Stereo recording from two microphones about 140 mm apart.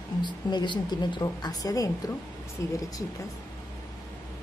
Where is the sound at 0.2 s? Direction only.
30° left (ahead or behind).